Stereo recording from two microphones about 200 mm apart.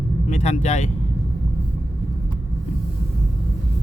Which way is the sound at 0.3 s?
35° left (ahead or behind).